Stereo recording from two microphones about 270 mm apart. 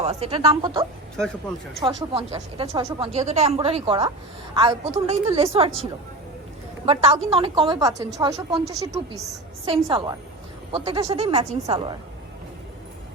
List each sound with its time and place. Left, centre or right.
0.0 s speech: right
6.8 s a woman's voice: right